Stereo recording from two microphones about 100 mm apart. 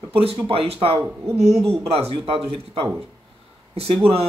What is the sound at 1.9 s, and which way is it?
Speech, 75° right (ahead or behind).